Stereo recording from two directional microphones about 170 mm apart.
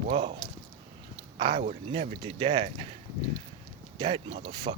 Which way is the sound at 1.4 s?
30° right (ahead or behind).